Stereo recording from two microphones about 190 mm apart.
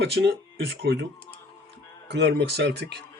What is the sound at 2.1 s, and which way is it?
Speech, 65° right (ahead or behind).